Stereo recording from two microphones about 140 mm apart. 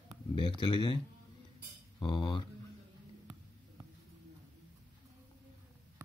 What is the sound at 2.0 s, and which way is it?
Speech, 40° left (ahead or behind).